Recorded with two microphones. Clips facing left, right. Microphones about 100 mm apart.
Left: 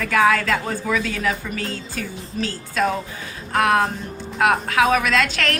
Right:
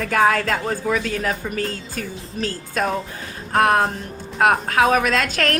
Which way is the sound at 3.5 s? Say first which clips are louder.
Right 1 dB; 35° right (ahead or behind).